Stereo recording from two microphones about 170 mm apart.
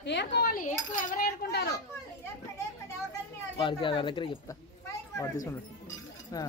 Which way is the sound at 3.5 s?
30° left (ahead or behind).